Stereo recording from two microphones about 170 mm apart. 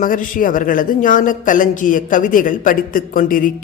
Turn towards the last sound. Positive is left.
turn(degrees=55)  # may be behind; listen again after turning